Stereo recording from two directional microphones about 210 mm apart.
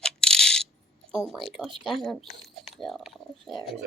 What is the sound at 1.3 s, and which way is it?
Speech, centre (ahead or behind).